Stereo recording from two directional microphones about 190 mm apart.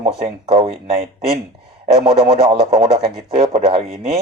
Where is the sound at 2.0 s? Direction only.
30° right (ahead or behind).